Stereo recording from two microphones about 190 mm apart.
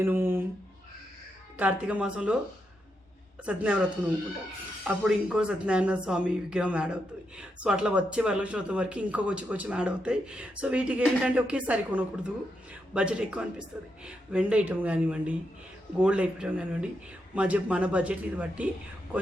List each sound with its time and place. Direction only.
0.0 s a sound: 10° right (ahead or behind)
1.5 s speech: 10° right (ahead or behind)
3.4 s speech: 5° right (ahead or behind)
4.9 s speech: 5° right (ahead or behind)